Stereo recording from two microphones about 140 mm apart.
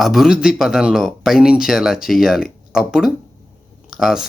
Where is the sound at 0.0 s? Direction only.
Centre (ahead or behind).